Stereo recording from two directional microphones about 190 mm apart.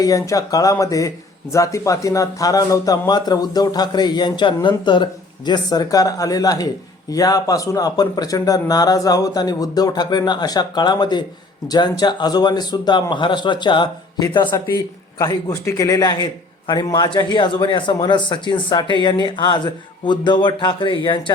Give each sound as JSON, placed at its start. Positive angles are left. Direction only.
{"t": 0.0, "sound": "a man's voice", "side_deg": 20}